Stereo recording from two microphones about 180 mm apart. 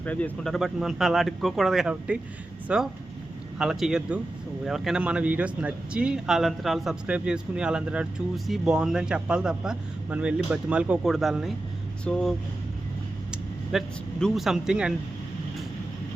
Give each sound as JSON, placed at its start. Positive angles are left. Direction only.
{"t": 0.0, "sound": "speech", "side_deg": 10}
{"t": 13.3, "sound": "speech", "side_deg": 0}